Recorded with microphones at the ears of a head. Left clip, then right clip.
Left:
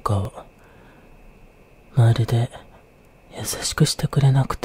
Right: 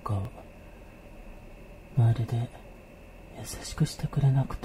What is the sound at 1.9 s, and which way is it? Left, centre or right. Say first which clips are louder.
Speech: left 10 dB; left.